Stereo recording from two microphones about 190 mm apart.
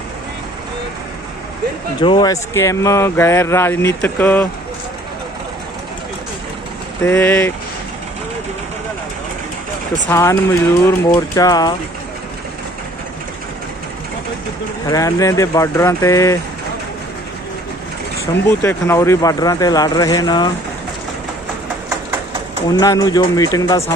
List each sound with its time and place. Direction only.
2.0 s speech: 20° left (ahead or behind)
7.0 s speech: 10° left (ahead or behind)
10.1 s speech: 15° left (ahead or behind)
14.8 s speech: 15° left (ahead or behind)
18.4 s speech: 15° left (ahead or behind)
22.7 s speech: 20° left (ahead or behind)